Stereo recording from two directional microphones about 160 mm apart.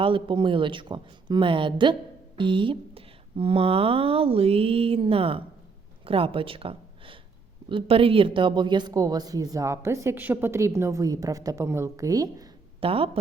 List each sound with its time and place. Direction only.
0.0 s a woman's voice: 35° right (ahead or behind)
12.8 s speech: 35° right (ahead or behind)